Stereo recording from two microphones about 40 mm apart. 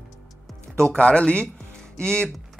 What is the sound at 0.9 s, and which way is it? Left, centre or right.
Speech, left.